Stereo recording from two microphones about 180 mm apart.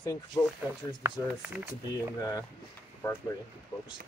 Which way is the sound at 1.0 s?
10° right (ahead or behind).